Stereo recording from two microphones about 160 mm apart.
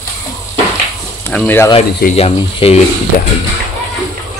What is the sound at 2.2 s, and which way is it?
Speech, 35° left (ahead or behind).